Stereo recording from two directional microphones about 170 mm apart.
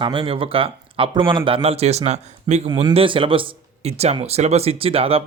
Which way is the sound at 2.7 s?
30° right (ahead or behind).